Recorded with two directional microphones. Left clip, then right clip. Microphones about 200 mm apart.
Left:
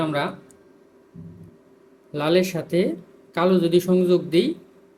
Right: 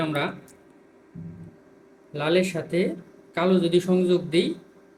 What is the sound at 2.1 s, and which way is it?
Speech, 20° left (ahead or behind).